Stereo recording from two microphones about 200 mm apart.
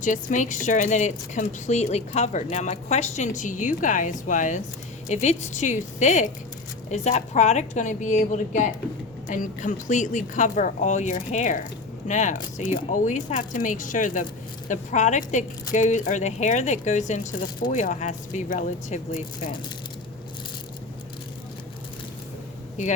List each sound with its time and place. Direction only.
0.0 s a woman's voice: 40° left (ahead or behind)